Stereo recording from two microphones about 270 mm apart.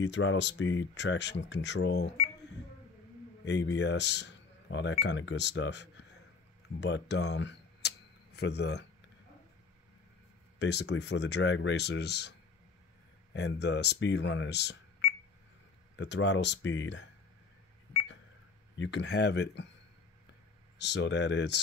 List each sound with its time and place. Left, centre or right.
0.0 s speech: left
3.4 s speech: left
6.8 s camera: left
10.6 s speech: left
16.0 s speech: left
18.8 s speech: left
20.7 s speech: left